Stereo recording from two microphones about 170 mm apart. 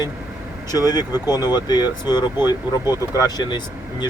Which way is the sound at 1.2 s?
25° left (ahead or behind).